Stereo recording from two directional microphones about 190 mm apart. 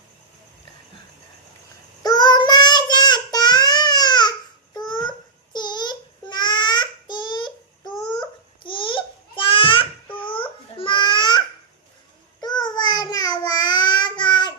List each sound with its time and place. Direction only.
2.0 s child singing: 20° left (ahead or behind)
8.2 s babbling: 25° left (ahead or behind)
12.4 s child singing: 20° left (ahead or behind)